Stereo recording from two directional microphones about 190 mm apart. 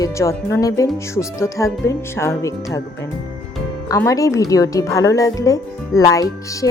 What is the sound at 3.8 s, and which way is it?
Speech, 15° left (ahead or behind).